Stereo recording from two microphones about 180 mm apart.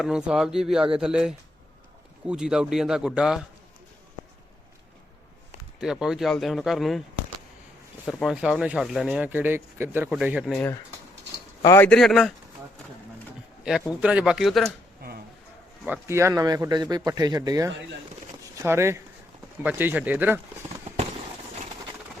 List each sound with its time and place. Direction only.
0.0 s speech: 5° right (ahead or behind)
5.8 s speech: 5° right (ahead or behind)
8.0 s speech: centre (ahead or behind)
11.6 s speech: 15° left (ahead or behind)
11.9 s speech: centre (ahead or behind)
13.7 s speech: 5° right (ahead or behind)
15.0 s a sound: 55° right (ahead or behind)
15.8 s speech: 10° right (ahead or behind)